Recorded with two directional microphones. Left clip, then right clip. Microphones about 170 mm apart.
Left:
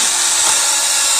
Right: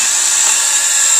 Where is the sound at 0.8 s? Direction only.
5° right (ahead or behind).